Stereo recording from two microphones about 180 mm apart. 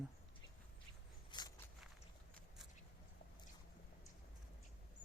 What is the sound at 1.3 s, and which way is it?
Walk, 25° left (ahead or behind).